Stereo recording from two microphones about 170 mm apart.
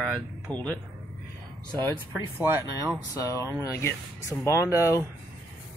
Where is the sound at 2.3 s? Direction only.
20° left (ahead or behind).